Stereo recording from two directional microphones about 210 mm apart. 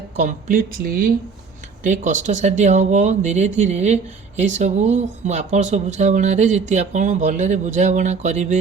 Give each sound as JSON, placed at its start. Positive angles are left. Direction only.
{"t": 0.2, "sound": "speech", "side_deg": -35}